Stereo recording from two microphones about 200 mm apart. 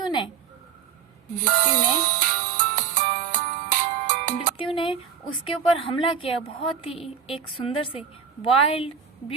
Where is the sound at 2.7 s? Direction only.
40° right (ahead or behind).